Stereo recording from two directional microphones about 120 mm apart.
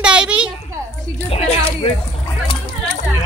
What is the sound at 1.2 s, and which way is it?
Speech, 55° left (ahead or behind).